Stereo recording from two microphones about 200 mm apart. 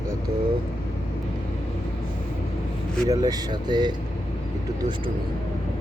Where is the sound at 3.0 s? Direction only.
20° right (ahead or behind).